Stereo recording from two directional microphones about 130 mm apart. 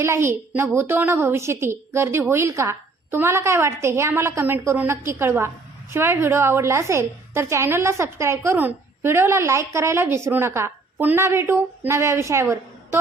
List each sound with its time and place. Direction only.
0.0 s a woman's voice: 20° right (ahead or behind)